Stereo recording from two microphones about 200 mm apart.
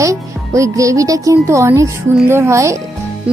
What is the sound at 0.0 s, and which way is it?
Speech, 15° right (ahead or behind).